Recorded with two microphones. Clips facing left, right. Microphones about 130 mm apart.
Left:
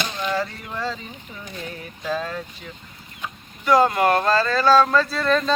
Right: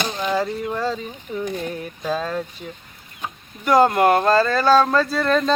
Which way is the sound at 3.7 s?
50° right (ahead or behind).